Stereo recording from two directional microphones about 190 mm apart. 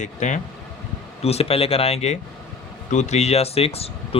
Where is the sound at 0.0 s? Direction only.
40° left (ahead or behind).